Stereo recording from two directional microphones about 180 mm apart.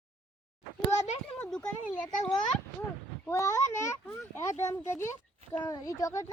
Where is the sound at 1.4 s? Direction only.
5° left (ahead or behind).